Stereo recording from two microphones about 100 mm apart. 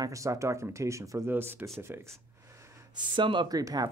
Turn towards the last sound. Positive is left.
turn(degrees=-40)  # may be behind; listen again after turning